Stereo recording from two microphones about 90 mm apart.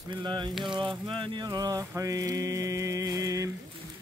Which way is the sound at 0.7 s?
65° right (ahead or behind).